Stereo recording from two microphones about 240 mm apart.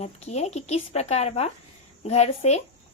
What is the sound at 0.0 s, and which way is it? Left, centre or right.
A woman's voice, left.